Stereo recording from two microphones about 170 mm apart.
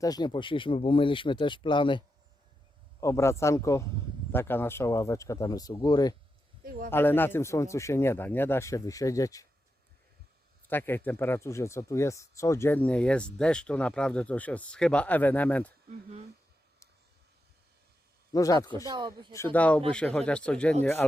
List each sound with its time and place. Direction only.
0.0 s speech: 25° left (ahead or behind)
3.0 s speech: 15° left (ahead or behind)
6.9 s speech: 10° left (ahead or behind)
10.7 s speech: 10° left (ahead or behind)
15.9 s speech: 40° right (ahead or behind)
18.3 s speech: 20° left (ahead or behind)
18.9 s speech: 30° right (ahead or behind)
19.5 s speech: 10° left (ahead or behind)